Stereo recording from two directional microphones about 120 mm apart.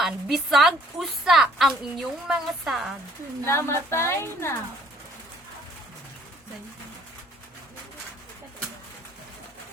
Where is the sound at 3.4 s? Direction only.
20° left (ahead or behind).